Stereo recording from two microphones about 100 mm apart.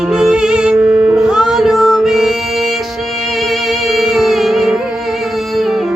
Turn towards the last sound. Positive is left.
turn(degrees=0)  # may be behind; listen again after turning